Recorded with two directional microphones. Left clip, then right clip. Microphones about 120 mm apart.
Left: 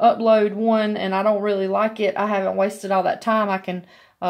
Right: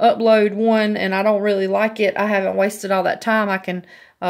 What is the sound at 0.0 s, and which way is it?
A woman's voice, 50° right (ahead or behind).